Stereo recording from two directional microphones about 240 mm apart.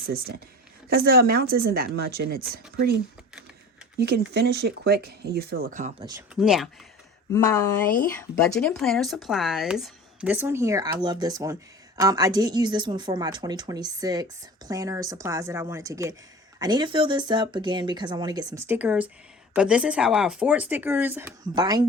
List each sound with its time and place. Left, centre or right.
0.1 s speech: right
6.3 s speech: centre
7.3 s a woman's voice: centre